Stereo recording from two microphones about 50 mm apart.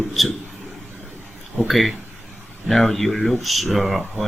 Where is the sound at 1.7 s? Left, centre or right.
Centre.